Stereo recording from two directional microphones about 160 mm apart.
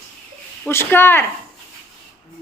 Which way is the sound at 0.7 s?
15° left (ahead or behind).